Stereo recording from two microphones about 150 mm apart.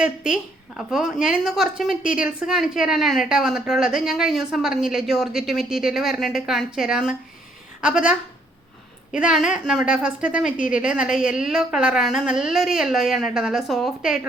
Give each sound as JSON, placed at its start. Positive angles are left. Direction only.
{"t": 0.0, "sound": "a woman's voice", "side_deg": -5}
{"t": 9.1, "sound": "a woman's voice", "side_deg": -5}